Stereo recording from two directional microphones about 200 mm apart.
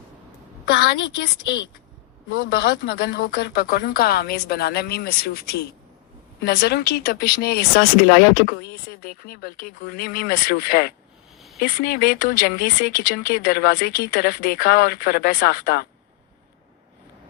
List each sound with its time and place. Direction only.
0.6 s speech: 50° left (ahead or behind)
2.3 s speech: 50° left (ahead or behind)
11.3 s a sound: centre (ahead or behind)
11.6 s speech: 50° left (ahead or behind)